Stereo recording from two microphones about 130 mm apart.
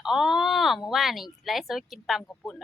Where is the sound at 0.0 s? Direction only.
5° right (ahead or behind).